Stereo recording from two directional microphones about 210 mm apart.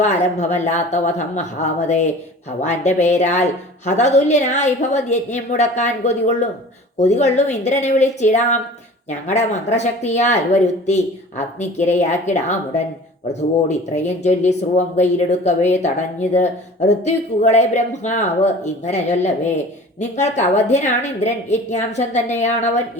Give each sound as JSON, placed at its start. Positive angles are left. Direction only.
{"t": 0.0, "sound": "a woman's voice", "side_deg": 35}
{"t": 2.6, "sound": "a woman's voice", "side_deg": 35}